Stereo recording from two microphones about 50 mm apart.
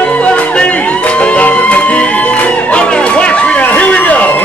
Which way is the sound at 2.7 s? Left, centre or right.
Left.